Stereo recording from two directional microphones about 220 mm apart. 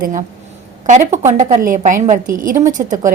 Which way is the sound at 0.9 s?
35° right (ahead or behind).